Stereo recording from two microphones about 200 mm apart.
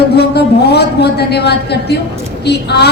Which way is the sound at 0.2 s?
55° left (ahead or behind).